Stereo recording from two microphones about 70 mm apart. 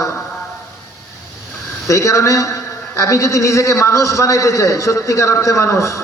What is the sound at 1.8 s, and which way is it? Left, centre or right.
A man's voice, left.